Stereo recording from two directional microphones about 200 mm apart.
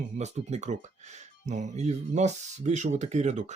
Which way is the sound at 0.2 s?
35° right (ahead or behind).